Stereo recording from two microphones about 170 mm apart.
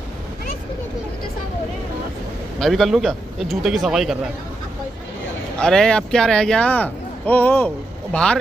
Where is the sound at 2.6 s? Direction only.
Centre (ahead or behind).